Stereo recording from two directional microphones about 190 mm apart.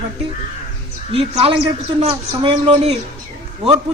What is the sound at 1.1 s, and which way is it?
A woman's voice, 30° right (ahead or behind).